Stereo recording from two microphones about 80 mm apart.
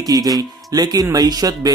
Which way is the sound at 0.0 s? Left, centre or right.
Right.